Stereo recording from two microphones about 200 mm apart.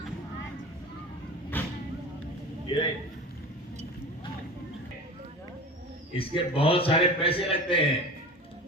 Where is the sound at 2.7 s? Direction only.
25° left (ahead or behind).